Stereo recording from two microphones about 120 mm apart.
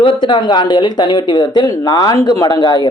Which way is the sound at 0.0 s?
45° left (ahead or behind).